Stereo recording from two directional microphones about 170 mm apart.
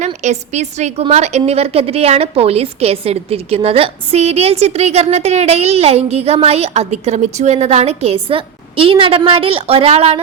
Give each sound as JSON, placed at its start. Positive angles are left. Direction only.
{"t": 0.0, "sound": "a woman's voice", "side_deg": -40}